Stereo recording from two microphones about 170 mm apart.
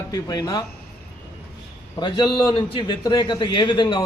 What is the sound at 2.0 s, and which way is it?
A man's voice, 25° left (ahead or behind).